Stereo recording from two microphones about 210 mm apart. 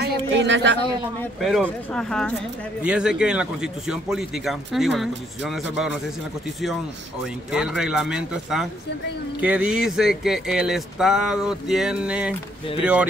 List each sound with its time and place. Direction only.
0.0 s a woman's voice: 55° right (ahead or behind)
1.4 s a man's voice: centre (ahead or behind)
7.5 s a man's voice: 5° right (ahead or behind)